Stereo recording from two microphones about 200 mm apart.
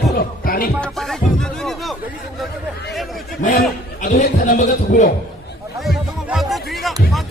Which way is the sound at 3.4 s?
45° left (ahead or behind).